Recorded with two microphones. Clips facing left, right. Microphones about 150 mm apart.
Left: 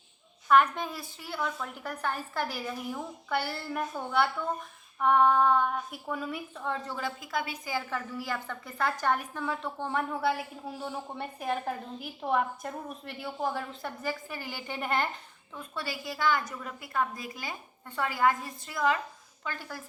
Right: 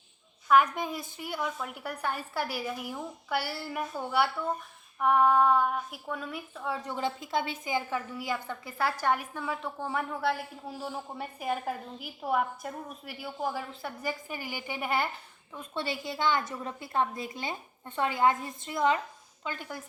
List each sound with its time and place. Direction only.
0.4 s a woman's voice: 5° right (ahead or behind)
6.8 s a woman's voice: 20° right (ahead or behind); by 13.9 s 5° right (ahead or behind)
14.0 s a woman's voice: 15° right (ahead or behind)
15.5 s a woman's voice: 25° right (ahead or behind)